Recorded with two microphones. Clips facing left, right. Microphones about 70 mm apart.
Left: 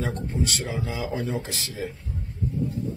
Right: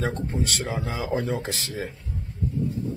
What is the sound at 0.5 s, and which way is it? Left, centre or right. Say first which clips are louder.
Speech: right 1 dB; right.